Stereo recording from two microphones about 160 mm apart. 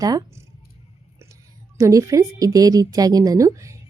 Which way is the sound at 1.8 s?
20° right (ahead or behind).